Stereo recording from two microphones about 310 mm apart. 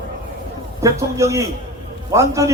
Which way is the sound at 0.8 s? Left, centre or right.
Centre.